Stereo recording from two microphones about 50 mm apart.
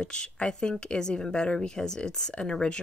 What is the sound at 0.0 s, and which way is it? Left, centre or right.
A woman's voice, centre.